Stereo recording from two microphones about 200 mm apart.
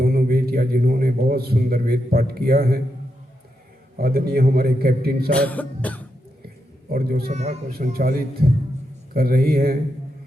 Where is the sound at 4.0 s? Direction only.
50° right (ahead or behind).